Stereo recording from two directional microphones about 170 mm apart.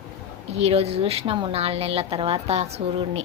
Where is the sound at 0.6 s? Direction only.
35° right (ahead or behind).